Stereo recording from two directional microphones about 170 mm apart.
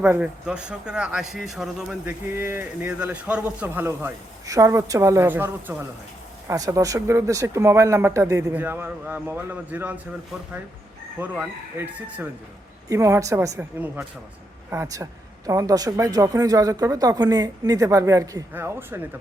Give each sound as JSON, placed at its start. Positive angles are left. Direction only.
{"t": 0.0, "sound": "speech", "side_deg": -10}
{"t": 2.3, "sound": "speech", "side_deg": -15}
{"t": 11.2, "sound": "speech", "side_deg": -10}